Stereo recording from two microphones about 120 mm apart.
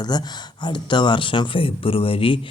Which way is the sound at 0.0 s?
35° left (ahead or behind).